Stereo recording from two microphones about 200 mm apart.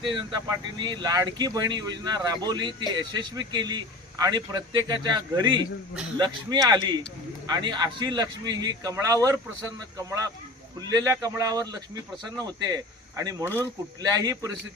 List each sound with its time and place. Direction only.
0.0 s a man's voice: 25° right (ahead or behind)
10.8 s a man's voice: 15° right (ahead or behind)